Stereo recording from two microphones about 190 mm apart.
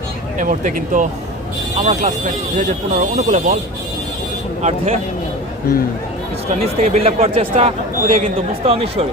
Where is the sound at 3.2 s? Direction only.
40° right (ahead or behind).